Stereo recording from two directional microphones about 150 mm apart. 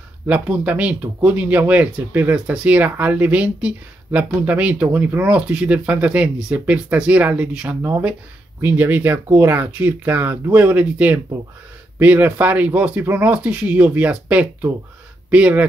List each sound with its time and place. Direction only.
0.3 s speech: 10° right (ahead or behind)